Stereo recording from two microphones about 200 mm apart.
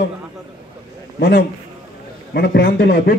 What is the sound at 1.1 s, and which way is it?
A man's voice, 50° left (ahead or behind).